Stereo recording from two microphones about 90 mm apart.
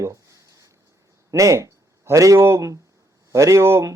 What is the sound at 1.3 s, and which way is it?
Speech, 35° right (ahead or behind).